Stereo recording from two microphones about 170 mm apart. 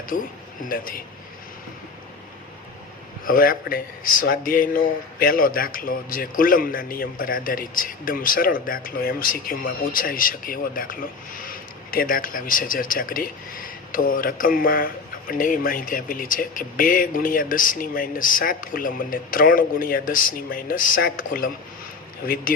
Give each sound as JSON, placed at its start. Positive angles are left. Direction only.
{"t": 0.1, "sound": "speech", "side_deg": 55}
{"t": 3.2, "sound": "speech", "side_deg": 55}